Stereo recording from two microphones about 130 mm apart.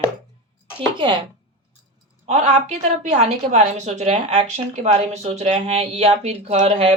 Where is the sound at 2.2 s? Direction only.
60° right (ahead or behind).